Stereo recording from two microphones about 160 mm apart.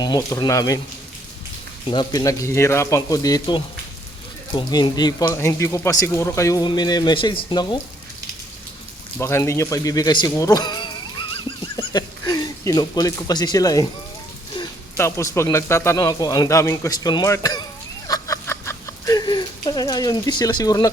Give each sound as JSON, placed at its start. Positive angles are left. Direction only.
{"t": 0.0, "sound": "speech", "side_deg": 25}
{"t": 1.9, "sound": "speech", "side_deg": 25}
{"t": 9.1, "sound": "speech", "side_deg": 15}
{"t": 14.9, "sound": "speech", "side_deg": 15}
{"t": 18.1, "sound": "a sound", "side_deg": 20}